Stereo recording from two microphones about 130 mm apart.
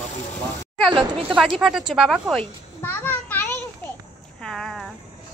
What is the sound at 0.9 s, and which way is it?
Speech, 40° right (ahead or behind).